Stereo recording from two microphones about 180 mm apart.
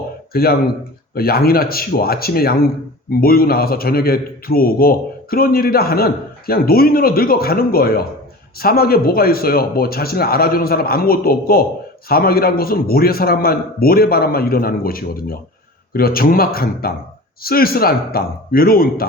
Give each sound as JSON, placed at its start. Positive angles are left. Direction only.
{"t": 0.3, "sound": "a man's voice", "side_deg": 55}